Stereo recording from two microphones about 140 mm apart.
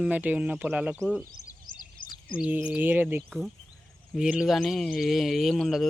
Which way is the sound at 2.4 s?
10° right (ahead or behind).